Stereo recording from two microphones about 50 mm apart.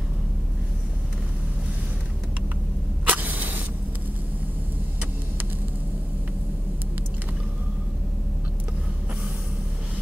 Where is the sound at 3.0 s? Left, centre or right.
Right.